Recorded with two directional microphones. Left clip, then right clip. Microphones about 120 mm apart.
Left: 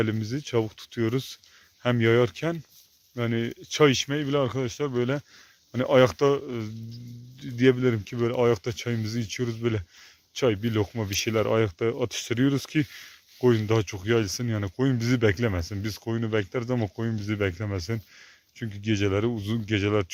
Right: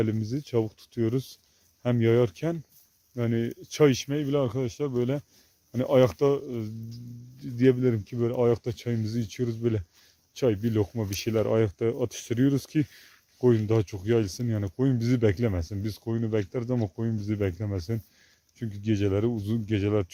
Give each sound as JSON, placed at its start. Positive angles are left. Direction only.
{"t": 0.0, "sound": "speech", "side_deg": -15}